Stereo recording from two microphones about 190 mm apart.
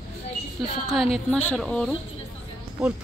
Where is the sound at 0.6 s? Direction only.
Centre (ahead or behind).